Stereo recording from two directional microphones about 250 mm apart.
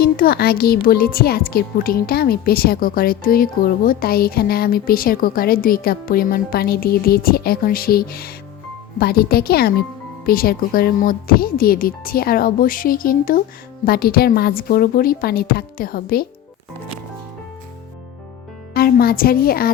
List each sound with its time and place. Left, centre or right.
0.0 s speech: left
18.7 s speech: left